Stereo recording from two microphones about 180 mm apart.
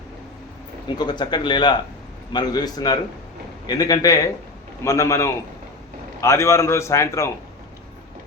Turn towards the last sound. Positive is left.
turn(degrees=15)  # may be behind; listen again after turning